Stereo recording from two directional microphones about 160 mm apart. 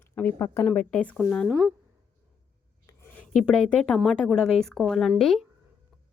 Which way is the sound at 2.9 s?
15° left (ahead or behind).